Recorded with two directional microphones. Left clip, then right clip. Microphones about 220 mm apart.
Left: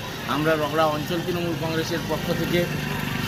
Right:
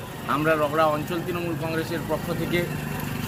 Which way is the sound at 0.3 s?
5° right (ahead or behind).